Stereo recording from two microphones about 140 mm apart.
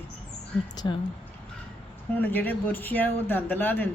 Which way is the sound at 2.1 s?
10° left (ahead or behind).